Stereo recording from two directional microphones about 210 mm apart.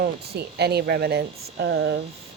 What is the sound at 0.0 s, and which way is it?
A woman's voice, 50° right (ahead or behind).